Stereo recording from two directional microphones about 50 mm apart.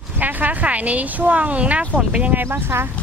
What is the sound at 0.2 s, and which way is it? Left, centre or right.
Speech, right.